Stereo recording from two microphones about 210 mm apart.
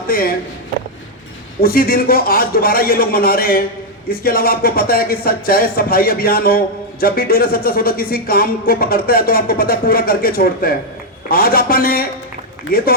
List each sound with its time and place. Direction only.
0.1 s speech: 45° left (ahead or behind)
1.6 s speech: 45° left (ahead or behind)